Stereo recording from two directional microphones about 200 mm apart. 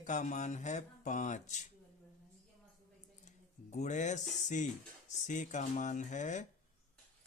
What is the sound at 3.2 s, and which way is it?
Speech, 35° left (ahead or behind).